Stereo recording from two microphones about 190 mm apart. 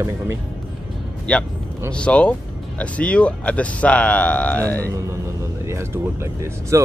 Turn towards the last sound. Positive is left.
turn(degrees=-15)  # may be behind; listen again after turning